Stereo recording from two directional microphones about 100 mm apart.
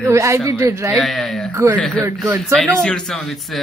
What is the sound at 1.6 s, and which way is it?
Speech, 30° right (ahead or behind).